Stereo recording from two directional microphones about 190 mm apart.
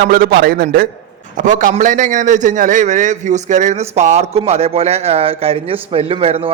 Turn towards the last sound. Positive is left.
turn(degrees=-30)  # may be behind; listen again after turning